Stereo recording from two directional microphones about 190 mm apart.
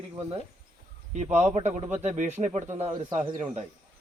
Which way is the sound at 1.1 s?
35° right (ahead or behind).